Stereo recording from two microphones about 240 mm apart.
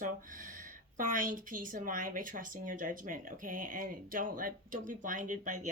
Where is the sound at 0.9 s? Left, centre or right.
Right.